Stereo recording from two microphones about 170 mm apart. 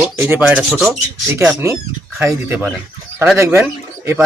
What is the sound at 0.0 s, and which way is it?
Speech, 10° right (ahead or behind).